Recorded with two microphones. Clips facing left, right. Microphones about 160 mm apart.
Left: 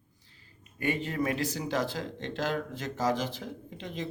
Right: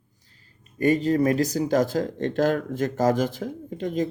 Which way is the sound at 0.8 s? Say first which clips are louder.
Right 10 dB; 40° right (ahead or behind).